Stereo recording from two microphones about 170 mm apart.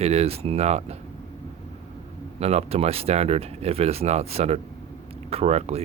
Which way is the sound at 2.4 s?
40° right (ahead or behind).